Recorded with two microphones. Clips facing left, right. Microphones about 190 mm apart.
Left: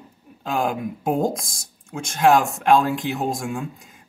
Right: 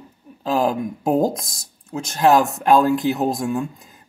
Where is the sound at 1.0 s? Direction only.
Centre (ahead or behind).